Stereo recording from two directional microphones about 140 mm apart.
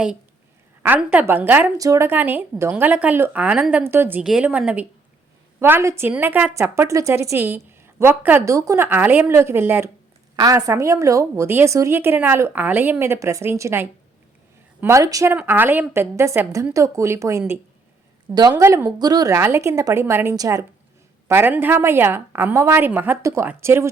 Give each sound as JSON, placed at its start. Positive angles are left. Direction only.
{"t": 0.8, "sound": "a woman's voice", "side_deg": -10}
{"t": 4.2, "sound": "a woman's voice", "side_deg": -5}
{"t": 18.3, "sound": "a woman's voice", "side_deg": -30}
{"t": 21.2, "sound": "a woman's voice", "side_deg": -15}